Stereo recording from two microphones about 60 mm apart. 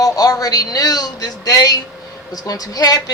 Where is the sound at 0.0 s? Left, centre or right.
Left.